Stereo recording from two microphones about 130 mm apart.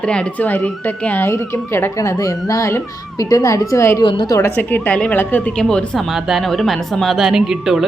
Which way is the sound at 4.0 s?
35° left (ahead or behind).